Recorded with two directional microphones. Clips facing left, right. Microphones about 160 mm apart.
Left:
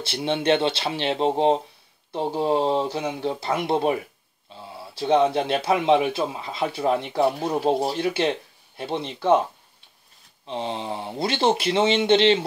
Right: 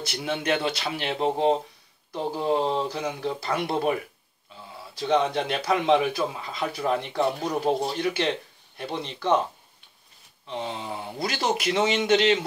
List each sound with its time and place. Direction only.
0.0 s speech: 30° left (ahead or behind)
4.5 s a sound: 30° left (ahead or behind)
4.9 s speech: 30° left (ahead or behind)
7.2 s speech: 5° left (ahead or behind)
7.9 s speech: 30° left (ahead or behind)
10.4 s speech: 30° left (ahead or behind)